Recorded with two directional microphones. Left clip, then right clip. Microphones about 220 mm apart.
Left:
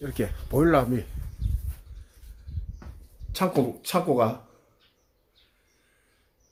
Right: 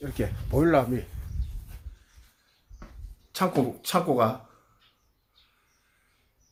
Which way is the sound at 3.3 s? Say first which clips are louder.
Left 1 dB; 5° right (ahead or behind).